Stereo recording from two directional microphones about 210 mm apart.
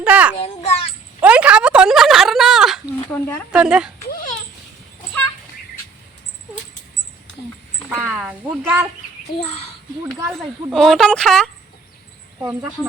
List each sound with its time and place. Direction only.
0.0 s speech: 5° right (ahead or behind)
0.4 s children playing: 30° left (ahead or behind)
1.2 s a sound: 5° right (ahead or behind)
3.1 s speech: 10° left (ahead or behind)
3.5 s a woman's voice: 5° right (ahead or behind)
7.9 s speech: 5° right (ahead or behind)
10.2 s a woman's voice: centre (ahead or behind)